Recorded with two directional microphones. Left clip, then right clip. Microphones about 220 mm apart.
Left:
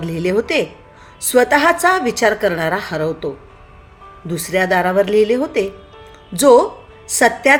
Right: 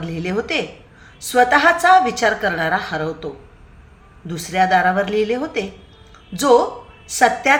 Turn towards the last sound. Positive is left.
turn(degrees=45)  # may be behind; listen again after turning